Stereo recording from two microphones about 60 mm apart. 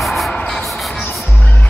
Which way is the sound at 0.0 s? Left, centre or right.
Centre.